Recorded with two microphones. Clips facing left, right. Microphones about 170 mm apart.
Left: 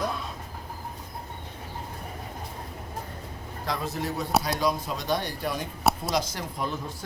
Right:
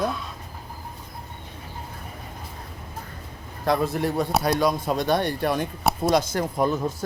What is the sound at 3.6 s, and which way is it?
Speech, 55° right (ahead or behind).